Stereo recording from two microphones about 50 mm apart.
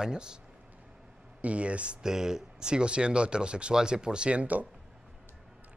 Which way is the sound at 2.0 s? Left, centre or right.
Centre.